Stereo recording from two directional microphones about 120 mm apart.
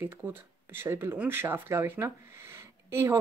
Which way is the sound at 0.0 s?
20° right (ahead or behind).